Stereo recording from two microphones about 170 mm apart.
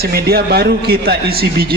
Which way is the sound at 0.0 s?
65° right (ahead or behind).